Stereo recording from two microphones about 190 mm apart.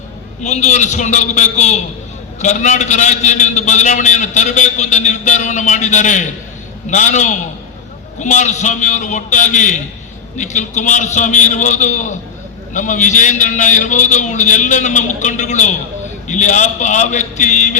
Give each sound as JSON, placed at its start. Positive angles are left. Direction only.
{"t": 0.4, "sound": "a man's voice", "side_deg": 40}